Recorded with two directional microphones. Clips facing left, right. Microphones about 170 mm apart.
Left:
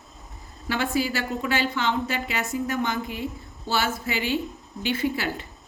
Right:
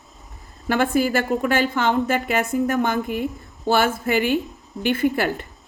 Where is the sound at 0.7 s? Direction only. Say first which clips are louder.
Right 6 dB; 50° right (ahead or behind).